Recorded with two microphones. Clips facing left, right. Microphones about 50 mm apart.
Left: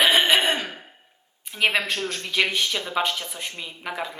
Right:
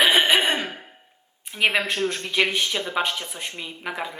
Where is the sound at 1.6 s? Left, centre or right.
Centre.